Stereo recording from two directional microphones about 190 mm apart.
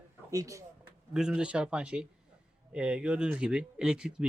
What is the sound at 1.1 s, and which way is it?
Speech, 5° right (ahead or behind).